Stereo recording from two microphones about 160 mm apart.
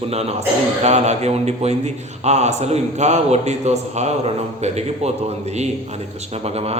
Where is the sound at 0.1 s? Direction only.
40° right (ahead or behind).